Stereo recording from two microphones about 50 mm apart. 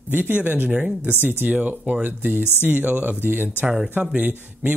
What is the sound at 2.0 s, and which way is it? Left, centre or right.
Speech, right.